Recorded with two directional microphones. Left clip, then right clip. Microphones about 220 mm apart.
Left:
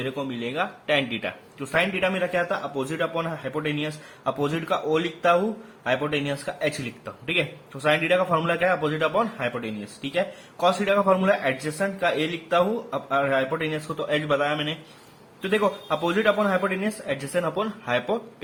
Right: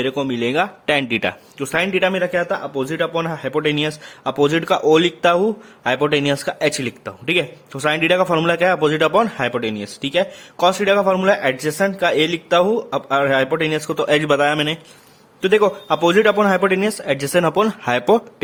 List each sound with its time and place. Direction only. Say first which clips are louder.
0.0 s a man's voice: right 9 dB; 50° right (ahead or behind)